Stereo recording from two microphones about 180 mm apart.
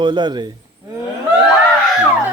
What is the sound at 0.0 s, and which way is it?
Speech, 25° right (ahead or behind).